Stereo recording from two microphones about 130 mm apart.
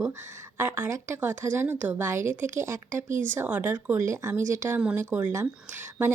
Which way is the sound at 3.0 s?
80° right.